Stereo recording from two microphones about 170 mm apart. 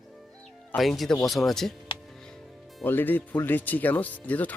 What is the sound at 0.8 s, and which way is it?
Speech, centre (ahead or behind).